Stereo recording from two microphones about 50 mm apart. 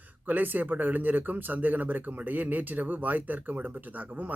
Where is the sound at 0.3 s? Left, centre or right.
Right.